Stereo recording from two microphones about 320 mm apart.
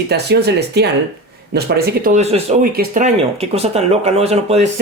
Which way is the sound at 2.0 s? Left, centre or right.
Right.